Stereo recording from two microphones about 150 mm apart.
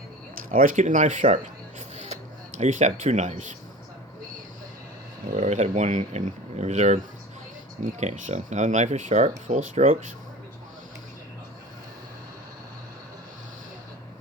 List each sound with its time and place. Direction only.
0.5 s speech: 65° right (ahead or behind)
2.6 s speech: 50° right (ahead or behind)
5.3 s speech: 50° right (ahead or behind)